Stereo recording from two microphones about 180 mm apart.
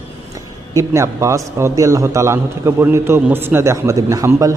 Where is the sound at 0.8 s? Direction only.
15° right (ahead or behind).